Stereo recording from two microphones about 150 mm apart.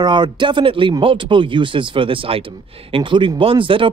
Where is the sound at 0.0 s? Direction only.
30° right (ahead or behind).